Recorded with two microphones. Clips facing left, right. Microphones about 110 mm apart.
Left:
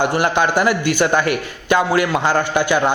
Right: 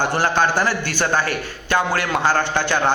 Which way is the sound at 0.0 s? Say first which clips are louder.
Left 2 dB; 15° left (ahead or behind).